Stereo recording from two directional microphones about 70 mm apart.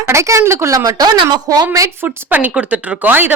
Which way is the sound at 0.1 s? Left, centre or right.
Right.